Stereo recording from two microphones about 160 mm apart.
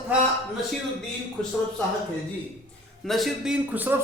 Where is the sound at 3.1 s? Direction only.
Centre (ahead or behind).